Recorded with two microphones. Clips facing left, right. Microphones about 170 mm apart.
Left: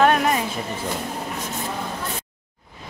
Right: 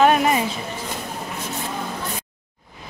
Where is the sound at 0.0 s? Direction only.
5° right (ahead or behind).